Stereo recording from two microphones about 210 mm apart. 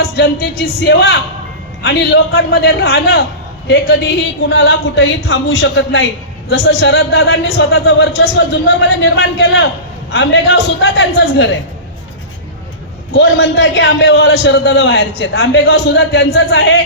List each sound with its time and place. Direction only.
0.0 s a man's voice: 50° left (ahead or behind)
4.4 s a man's voice: 60° left (ahead or behind)
13.1 s a man's voice: 55° left (ahead or behind)